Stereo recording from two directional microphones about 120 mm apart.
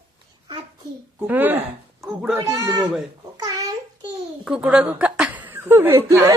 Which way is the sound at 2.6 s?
30° right (ahead or behind).